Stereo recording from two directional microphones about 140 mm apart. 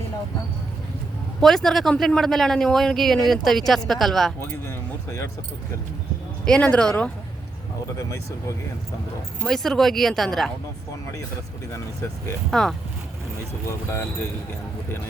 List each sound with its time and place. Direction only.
1.4 s speech: 5° left (ahead or behind)
4.4 s speech: 15° left (ahead or behind)
6.4 s speech: 5° left (ahead or behind)
7.9 s speech: 20° left (ahead or behind)
9.4 s speech: centre (ahead or behind)
12.5 s speech: 5° left (ahead or behind)